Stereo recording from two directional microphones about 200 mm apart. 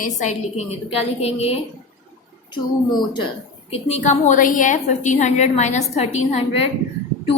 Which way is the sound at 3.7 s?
35° left (ahead or behind).